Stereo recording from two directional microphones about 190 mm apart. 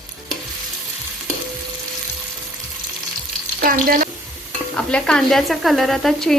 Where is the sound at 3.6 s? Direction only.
50° right (ahead or behind).